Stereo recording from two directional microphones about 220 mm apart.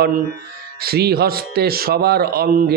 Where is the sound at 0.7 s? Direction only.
45° right (ahead or behind).